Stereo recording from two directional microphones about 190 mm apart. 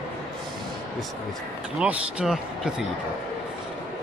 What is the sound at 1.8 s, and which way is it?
Speech, 5° right (ahead or behind).